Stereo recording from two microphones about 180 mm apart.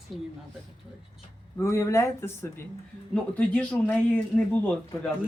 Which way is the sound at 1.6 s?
15° left (ahead or behind).